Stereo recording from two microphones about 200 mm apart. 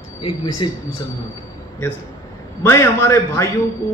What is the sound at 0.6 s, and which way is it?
Speech, 25° left (ahead or behind).